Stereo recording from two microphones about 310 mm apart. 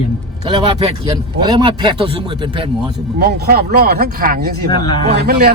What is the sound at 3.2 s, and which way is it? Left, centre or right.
Speech, right.